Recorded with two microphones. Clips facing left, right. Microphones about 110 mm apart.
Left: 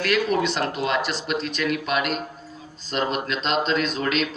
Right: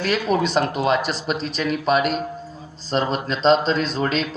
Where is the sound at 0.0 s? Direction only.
35° right (ahead or behind).